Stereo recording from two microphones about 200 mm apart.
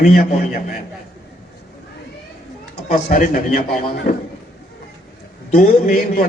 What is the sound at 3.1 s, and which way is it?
A man's voice, 45° left (ahead or behind).